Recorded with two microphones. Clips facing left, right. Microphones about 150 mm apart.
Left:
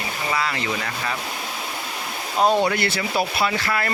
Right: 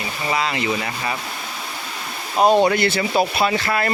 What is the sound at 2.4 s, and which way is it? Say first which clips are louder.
Speech: right 4 dB; 20° right (ahead or behind).